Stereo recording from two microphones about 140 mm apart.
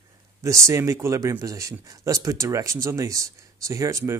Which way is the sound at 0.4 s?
20° right (ahead or behind).